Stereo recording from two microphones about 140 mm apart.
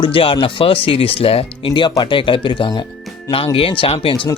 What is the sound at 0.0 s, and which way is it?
Speech, 40° left (ahead or behind).